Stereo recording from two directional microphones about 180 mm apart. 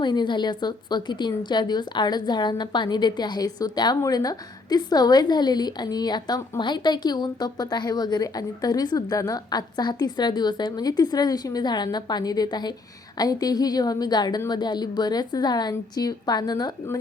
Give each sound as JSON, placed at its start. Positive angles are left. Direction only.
{"t": 0.0, "sound": "a woman's voice", "side_deg": 25}